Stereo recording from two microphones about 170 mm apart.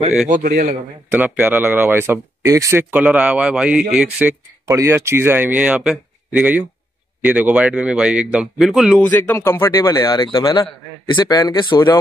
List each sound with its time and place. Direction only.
0.4 s a man's voice: 60° right (ahead or behind)
1.1 s speech: 10° right (ahead or behind)
4.6 s speech: 15° right (ahead or behind)
9.0 s speech: 10° left (ahead or behind)
10.2 s speech: 30° left (ahead or behind)